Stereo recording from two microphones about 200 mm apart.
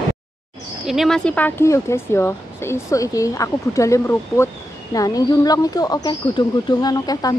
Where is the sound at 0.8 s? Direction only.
Centre (ahead or behind).